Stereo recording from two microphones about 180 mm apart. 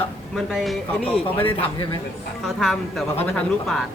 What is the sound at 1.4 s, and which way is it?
Speech, 30° left (ahead or behind).